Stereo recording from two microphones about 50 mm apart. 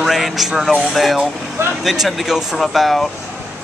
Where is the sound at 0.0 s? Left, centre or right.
Centre.